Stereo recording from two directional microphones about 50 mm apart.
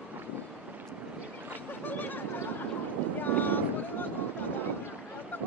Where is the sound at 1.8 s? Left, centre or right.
Left.